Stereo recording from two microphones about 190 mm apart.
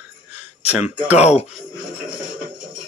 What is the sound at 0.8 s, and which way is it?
Speech, 35° left (ahead or behind).